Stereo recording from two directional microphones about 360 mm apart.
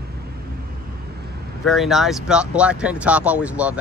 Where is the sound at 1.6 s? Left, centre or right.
Centre.